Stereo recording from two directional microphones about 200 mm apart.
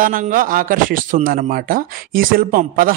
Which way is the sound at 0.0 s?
45° right (ahead or behind).